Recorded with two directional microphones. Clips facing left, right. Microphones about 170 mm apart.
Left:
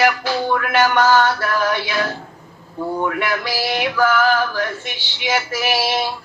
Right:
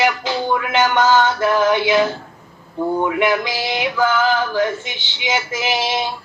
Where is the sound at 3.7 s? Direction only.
15° right (ahead or behind).